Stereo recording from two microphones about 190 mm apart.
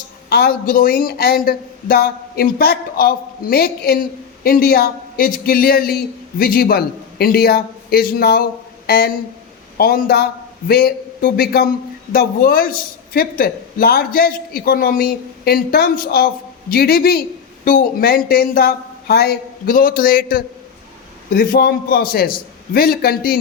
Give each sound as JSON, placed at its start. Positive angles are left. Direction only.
{"t": 0.3, "sound": "a man's voice", "side_deg": 55}